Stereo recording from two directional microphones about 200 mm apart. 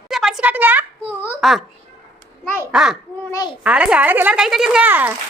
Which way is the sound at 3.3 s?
20° left (ahead or behind).